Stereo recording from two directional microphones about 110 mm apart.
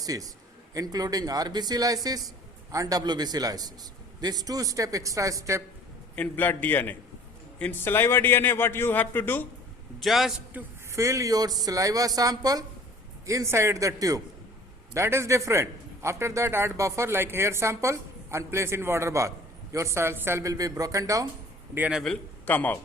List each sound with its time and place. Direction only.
0.0 s a man's voice: 35° right (ahead or behind)
6.1 s a man's voice: 15° left (ahead or behind)
10.0 s a man's voice: centre (ahead or behind)
10.5 s a man's voice: 15° right (ahead or behind)
10.9 s a man's voice: 30° right (ahead or behind)
21.8 s a man's voice: 10° right (ahead or behind)
22.4 s a man's voice: 15° left (ahead or behind)